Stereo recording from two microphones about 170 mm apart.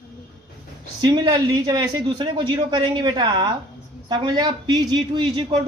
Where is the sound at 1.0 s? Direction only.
25° right (ahead or behind).